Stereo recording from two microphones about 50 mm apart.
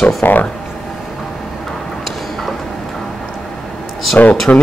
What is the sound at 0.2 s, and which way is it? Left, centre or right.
Speech, left.